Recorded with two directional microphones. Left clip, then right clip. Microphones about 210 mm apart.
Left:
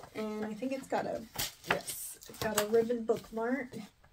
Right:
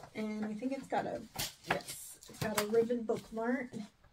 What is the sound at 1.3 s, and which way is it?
Speech, 25° left (ahead or behind).